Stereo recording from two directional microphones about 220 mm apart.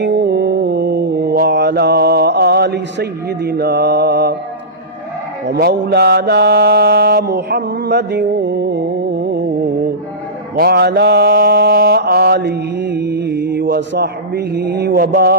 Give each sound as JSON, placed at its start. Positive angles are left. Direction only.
{"t": 0.0, "sound": "mantra", "side_deg": -50}
{"t": 5.5, "sound": "mantra", "side_deg": -45}
{"t": 10.5, "sound": "mantra", "side_deg": -45}